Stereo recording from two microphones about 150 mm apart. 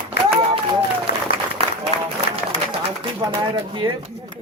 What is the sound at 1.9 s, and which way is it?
Applause, 40° left (ahead or behind).